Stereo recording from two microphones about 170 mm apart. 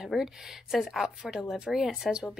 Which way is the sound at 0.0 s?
Centre (ahead or behind).